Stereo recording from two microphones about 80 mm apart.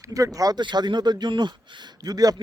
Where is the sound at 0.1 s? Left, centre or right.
Right.